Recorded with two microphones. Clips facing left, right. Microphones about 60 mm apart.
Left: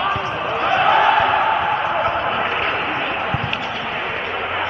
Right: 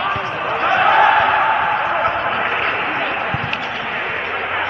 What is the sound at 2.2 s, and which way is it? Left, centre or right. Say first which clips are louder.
Basketball bounce: right 1 dB; right.